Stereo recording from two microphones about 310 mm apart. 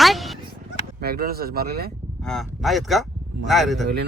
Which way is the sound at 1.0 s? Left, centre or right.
Right.